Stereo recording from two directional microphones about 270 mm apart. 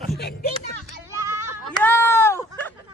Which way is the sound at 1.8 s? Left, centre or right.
Centre.